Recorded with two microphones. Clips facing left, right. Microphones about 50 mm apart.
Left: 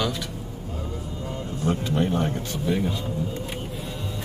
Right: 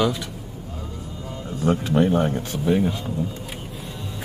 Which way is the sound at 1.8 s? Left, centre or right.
Right.